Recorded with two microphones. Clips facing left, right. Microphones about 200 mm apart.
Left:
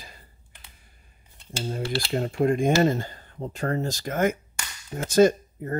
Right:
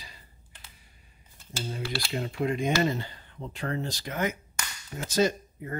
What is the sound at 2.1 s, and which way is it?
Speech, 45° left (ahead or behind).